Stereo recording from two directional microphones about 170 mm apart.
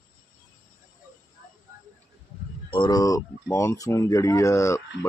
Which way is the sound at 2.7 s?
25° left (ahead or behind).